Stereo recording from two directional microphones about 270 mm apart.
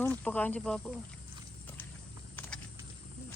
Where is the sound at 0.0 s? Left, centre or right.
Centre.